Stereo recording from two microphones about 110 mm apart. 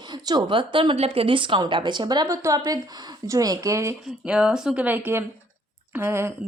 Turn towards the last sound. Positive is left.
turn(degrees=-20)  # may be behind; listen again after turning